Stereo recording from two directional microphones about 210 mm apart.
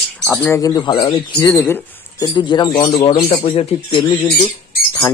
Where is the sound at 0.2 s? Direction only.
5° left (ahead or behind); by 4.0 s 30° left (ahead or behind).